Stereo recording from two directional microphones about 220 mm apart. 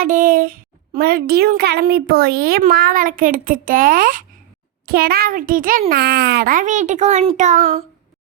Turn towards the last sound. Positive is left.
turn(degrees=-35)  # may be behind; listen again after turning